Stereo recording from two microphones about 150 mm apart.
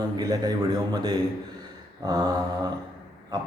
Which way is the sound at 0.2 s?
25° right (ahead or behind).